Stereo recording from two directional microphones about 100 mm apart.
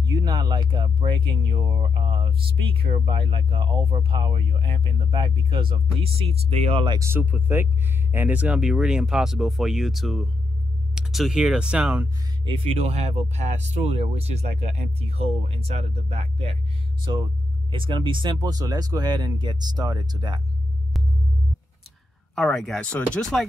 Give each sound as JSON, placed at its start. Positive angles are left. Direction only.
{"t": 0.0, "sound": "speech", "side_deg": -45}
{"t": 7.0, "sound": "speech", "side_deg": -20}
{"t": 12.4, "sound": "speech", "side_deg": -70}
{"t": 17.0, "sound": "speech", "side_deg": -50}
{"t": 22.3, "sound": "speech", "side_deg": 5}